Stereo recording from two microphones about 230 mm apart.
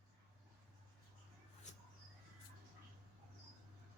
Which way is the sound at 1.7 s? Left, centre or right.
Left.